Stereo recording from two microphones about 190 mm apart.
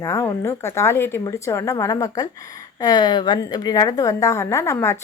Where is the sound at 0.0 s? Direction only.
15° left (ahead or behind).